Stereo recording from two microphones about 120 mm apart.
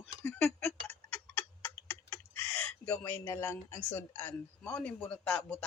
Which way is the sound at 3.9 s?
15° left (ahead or behind).